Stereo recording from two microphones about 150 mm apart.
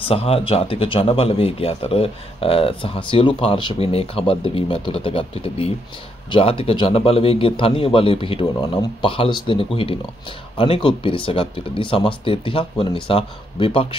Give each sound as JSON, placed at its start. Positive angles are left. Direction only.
{"t": 0.0, "sound": "speech", "side_deg": 40}